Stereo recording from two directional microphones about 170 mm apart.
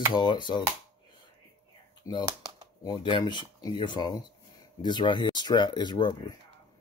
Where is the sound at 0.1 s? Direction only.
25° left (ahead or behind).